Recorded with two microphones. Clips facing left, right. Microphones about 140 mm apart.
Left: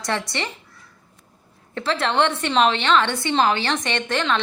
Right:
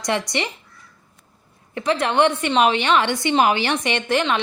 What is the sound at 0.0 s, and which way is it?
Speech, 15° right (ahead or behind).